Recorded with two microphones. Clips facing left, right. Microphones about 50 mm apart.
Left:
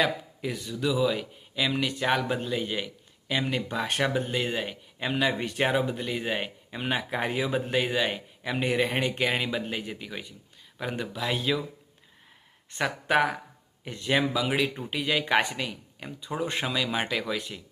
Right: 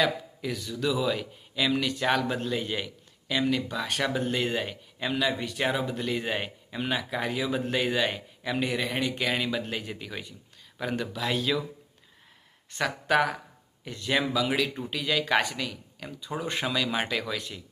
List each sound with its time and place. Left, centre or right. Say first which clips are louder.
0.0 s a man's voice: even; left
0.7 s speech: left 2 dB; centre
3.2 s speech: right 2 dB; left
4.0 s speech: right 1 dB; centre
4.9 s speech: left 1 dB; centre
5.6 s speech: left 2 dB; centre
6.0 s speech: even; centre
6.9 s speech: left 2 dB; left
8.7 s speech: left 3 dB; left; by 11.6 s centre
12.7 s speech: even; centre